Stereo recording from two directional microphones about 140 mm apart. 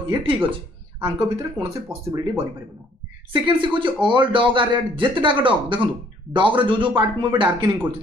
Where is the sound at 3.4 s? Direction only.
35° right (ahead or behind).